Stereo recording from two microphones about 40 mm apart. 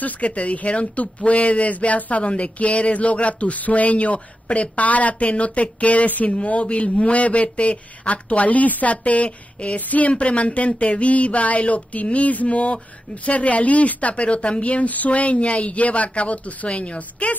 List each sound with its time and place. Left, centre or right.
0.0 s speech: left